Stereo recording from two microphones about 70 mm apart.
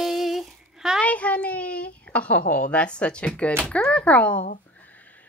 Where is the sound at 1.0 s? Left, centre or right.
Centre.